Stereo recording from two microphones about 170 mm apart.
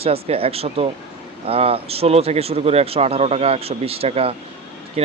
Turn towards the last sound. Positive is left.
turn(degrees=-40)  # may be behind; listen again after turning